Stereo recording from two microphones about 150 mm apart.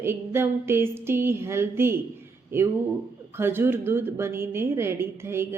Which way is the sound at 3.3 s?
15° right (ahead or behind).